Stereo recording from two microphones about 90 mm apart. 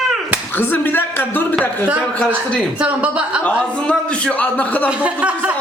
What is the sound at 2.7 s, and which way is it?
Speech, 10° right (ahead or behind).